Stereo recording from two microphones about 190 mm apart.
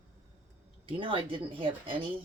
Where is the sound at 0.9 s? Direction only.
30° right (ahead or behind).